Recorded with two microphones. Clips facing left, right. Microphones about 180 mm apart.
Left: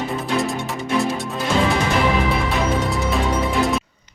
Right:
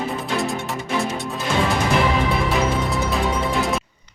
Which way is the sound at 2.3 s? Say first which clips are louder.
Even; centre (ahead or behind).